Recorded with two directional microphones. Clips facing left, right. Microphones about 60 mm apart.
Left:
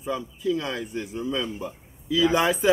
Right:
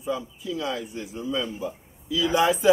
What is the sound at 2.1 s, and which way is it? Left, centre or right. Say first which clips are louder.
Speech: left 2 dB; left.